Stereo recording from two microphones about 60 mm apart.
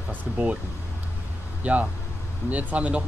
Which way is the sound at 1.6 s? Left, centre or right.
Right.